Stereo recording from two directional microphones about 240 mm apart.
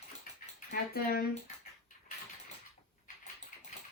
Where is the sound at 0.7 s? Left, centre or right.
Left.